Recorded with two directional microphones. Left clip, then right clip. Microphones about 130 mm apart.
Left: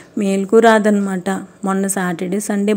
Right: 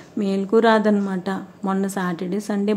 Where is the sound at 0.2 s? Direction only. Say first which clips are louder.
Left 6 dB; 25° left (ahead or behind).